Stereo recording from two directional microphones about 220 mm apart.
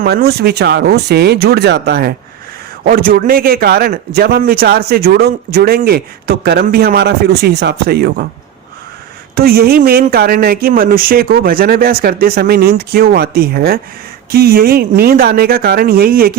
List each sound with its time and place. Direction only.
0.0 s a man's voice: 45° right (ahead or behind)
9.3 s a man's voice: 45° right (ahead or behind)